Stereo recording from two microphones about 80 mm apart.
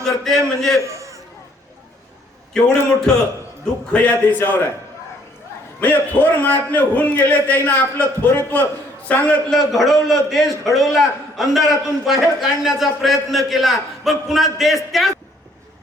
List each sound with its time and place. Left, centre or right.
0.0 s a man's voice: centre
0.8 s a sound: right
3.1 s a man's voice: centre
3.9 s a man's voice: centre
5.8 s a man's voice: centre
9.5 s a man's voice: centre